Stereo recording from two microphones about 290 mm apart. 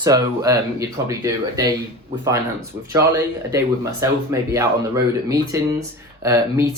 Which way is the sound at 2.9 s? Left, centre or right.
Centre.